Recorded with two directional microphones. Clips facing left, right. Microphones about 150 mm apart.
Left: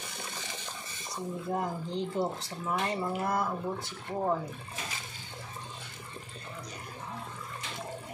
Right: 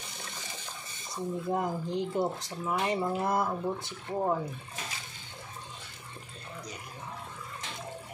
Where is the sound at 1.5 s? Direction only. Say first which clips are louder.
Right 2 dB; 15° right (ahead or behind).